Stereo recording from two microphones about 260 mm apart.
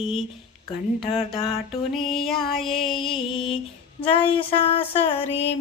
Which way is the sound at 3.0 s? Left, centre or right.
Centre.